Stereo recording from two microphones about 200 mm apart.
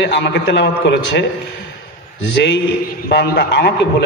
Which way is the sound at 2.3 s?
60° left (ahead or behind).